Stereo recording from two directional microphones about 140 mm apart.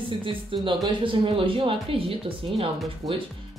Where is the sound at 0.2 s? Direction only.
40° right (ahead or behind).